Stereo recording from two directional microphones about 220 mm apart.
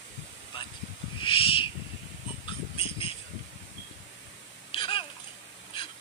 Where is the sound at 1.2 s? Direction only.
25° left (ahead or behind).